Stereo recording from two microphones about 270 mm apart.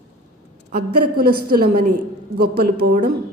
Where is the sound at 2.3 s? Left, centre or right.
Right.